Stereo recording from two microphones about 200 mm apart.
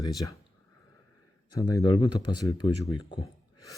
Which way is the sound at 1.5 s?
20° left (ahead or behind).